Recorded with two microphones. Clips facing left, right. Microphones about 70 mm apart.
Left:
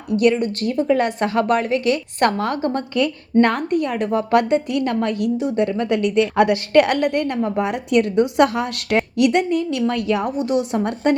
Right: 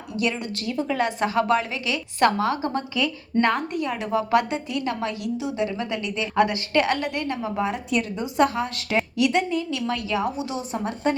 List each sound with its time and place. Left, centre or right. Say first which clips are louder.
0.2 s a woman's voice: left 8 dB; left
10.6 s a woman's voice: left 6 dB; left